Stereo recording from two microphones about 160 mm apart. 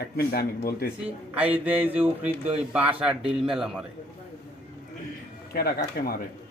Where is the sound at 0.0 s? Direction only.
80° left.